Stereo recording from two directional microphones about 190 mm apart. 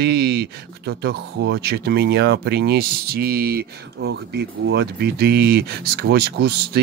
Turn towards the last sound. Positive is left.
turn(degrees=-60)  # may be behind; listen again after turning